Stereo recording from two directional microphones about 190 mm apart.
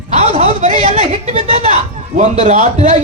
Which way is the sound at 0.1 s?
35° right (ahead or behind).